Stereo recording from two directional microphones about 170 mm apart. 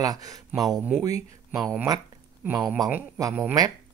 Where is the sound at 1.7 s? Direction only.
15° right (ahead or behind).